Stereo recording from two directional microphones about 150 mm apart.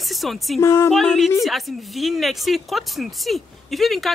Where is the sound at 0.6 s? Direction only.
20° left (ahead or behind).